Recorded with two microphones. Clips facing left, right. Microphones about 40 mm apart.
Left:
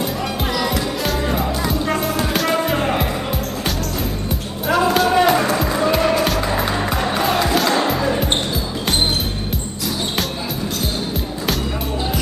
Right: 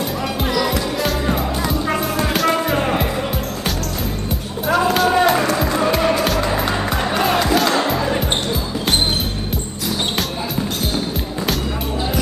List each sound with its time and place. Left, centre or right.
0.6 s music: centre
4.6 s music: centre